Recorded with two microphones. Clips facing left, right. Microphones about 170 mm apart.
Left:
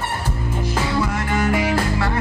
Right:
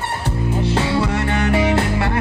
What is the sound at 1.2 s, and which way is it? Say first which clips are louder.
Music: right 1 dB; 70° right (ahead or behind).